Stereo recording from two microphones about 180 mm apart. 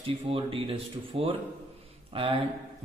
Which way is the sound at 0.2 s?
30° right (ahead or behind).